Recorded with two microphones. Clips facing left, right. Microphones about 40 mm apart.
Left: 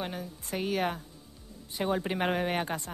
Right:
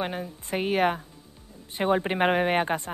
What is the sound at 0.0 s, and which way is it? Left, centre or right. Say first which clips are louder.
A woman's voice: right 6 dB; right.